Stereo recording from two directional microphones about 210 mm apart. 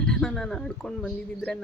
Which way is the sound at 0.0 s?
5° left (ahead or behind).